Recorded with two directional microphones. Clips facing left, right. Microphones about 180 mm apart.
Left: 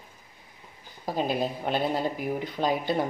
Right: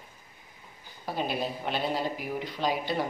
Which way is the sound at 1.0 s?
45° left (ahead or behind).